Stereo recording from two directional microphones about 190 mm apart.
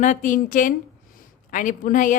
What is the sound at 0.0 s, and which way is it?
A woman's voice, 40° left (ahead or behind).